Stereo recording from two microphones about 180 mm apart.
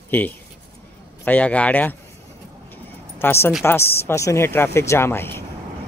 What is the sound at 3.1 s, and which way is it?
Speech, 15° left (ahead or behind).